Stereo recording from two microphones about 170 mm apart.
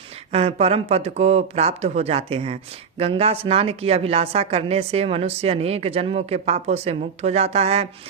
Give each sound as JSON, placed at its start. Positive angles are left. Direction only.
{"t": 0.3, "sound": "a woman's voice", "side_deg": -35}